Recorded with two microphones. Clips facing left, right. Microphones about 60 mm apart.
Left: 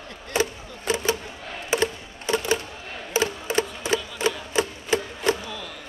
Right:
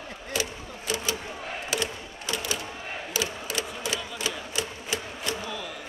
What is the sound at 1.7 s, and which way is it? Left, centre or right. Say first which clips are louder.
Music: left 9 dB; left.